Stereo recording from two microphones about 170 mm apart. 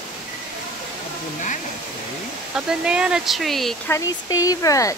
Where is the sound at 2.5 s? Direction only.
5° right (ahead or behind).